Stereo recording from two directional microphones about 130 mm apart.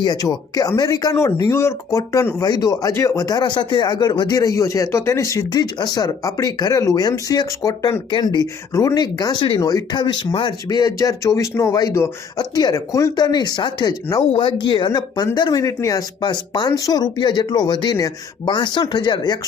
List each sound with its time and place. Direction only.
0.0 s speech: 30° left (ahead or behind)